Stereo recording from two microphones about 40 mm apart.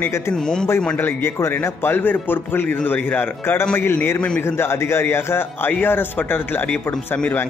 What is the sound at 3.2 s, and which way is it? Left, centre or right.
Speech, left.